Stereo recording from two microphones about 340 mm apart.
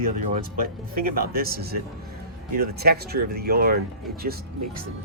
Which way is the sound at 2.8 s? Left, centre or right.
Right.